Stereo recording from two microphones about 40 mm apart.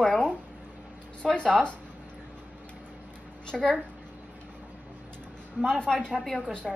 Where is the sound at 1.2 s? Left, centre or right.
Left.